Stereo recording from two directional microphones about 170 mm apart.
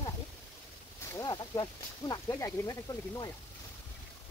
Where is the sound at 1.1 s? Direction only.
20° left (ahead or behind).